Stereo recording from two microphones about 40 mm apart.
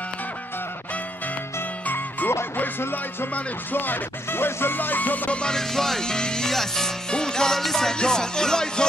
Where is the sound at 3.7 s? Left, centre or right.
Left.